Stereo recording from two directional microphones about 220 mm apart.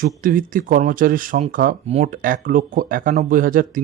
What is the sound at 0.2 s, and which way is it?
Speech, 40° right (ahead or behind).